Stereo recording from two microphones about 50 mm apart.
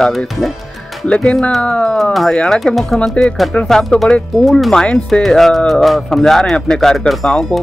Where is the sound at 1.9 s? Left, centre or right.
Centre.